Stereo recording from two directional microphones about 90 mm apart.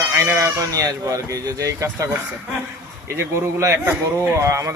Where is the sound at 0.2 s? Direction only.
30° right (ahead or behind).